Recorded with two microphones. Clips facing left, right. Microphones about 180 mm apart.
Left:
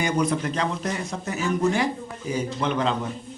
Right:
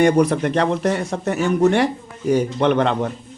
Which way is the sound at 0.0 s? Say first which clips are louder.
Right 8 dB; 65° right (ahead or behind).